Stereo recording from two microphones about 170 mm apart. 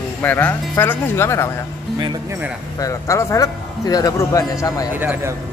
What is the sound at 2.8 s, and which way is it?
Speech, 20° left (ahead or behind).